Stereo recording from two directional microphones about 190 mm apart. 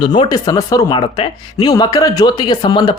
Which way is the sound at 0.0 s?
25° left (ahead or behind).